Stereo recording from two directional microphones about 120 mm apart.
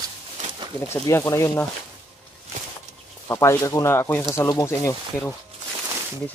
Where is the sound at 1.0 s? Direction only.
20° left (ahead or behind).